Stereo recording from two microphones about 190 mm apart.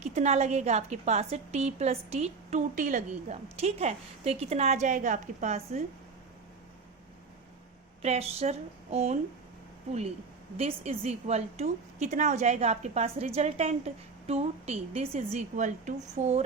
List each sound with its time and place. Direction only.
0.0 s a woman's voice: 35° right (ahead or behind)
8.0 s a woman's voice: 35° right (ahead or behind)
10.6 s a woman's voice: 35° right (ahead or behind)